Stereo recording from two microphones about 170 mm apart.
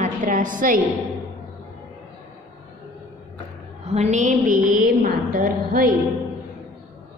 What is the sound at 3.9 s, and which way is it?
A woman's voice, 45° right (ahead or behind).